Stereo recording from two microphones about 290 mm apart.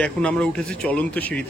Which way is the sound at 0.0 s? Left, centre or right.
Centre.